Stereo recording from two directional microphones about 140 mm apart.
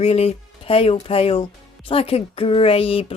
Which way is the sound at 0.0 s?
45° left (ahead or behind).